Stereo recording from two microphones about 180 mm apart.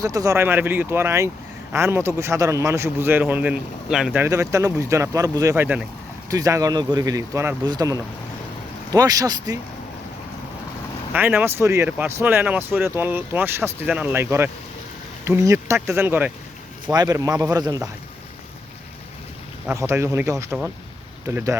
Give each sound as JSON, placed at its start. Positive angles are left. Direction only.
{"t": 0.0, "sound": "speech", "side_deg": -20}
{"t": 4.3, "sound": "speech", "side_deg": -20}
{"t": 11.1, "sound": "speech", "side_deg": -10}
{"t": 20.1, "sound": "speech", "side_deg": -10}